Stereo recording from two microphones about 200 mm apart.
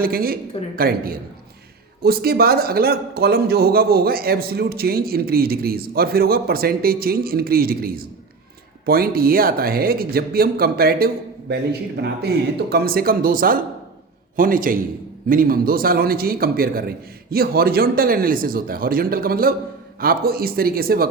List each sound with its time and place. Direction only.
0.0 s a man's voice: 45° right (ahead or behind)